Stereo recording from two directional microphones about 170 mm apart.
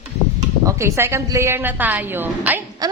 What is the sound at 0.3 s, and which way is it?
A woman's voice, 20° right (ahead or behind).